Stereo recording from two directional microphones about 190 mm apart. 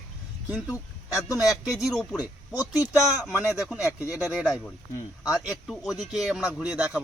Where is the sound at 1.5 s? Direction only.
20° left (ahead or behind).